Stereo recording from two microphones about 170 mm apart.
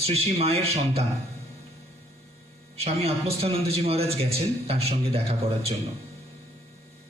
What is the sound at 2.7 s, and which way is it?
A man's voice, 35° right (ahead or behind).